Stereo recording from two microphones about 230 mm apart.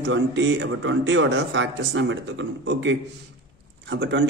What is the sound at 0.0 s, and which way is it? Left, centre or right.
A man's voice, right.